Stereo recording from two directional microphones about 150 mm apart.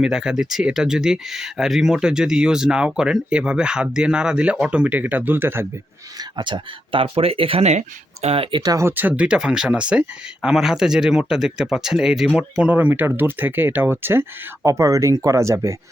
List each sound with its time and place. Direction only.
0.0 s speech: 5° right (ahead or behind)
6.3 s speech: 30° right (ahead or behind)
8.6 s speech: 20° right (ahead or behind)